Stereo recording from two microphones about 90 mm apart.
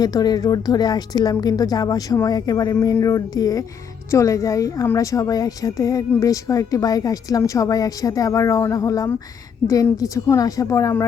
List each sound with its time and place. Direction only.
0.0 s speech: 45° left (ahead or behind)